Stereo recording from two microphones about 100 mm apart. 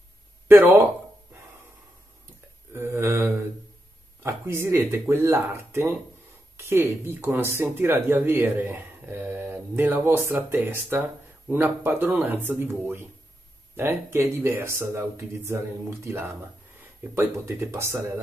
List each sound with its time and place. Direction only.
0.5 s speech: 20° right (ahead or behind)
2.7 s speech: 25° right (ahead or behind)